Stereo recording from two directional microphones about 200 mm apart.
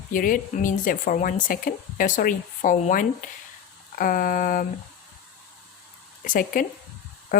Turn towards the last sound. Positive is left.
turn(degrees=45)  # may be behind; listen again after turning